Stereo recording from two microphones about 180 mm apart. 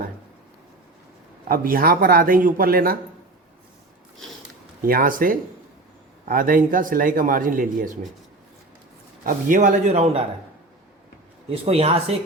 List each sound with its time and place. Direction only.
1.5 s a man's voice: 55° right (ahead or behind)
4.8 s a man's voice: 50° right (ahead or behind)
9.2 s a man's voice: 45° right (ahead or behind)
11.4 s a man's voice: 35° right (ahead or behind)